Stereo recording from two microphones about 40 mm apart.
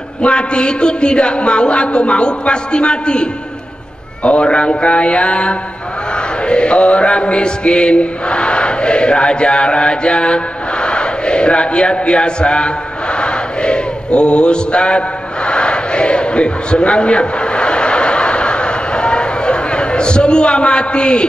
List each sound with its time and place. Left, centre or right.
0.2 s a woman's voice: left
6.4 s mantra: left